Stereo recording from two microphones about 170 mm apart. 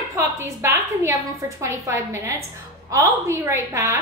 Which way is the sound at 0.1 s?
15° right (ahead or behind).